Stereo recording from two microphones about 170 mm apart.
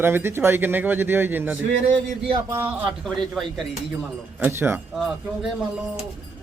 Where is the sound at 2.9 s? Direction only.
Centre (ahead or behind).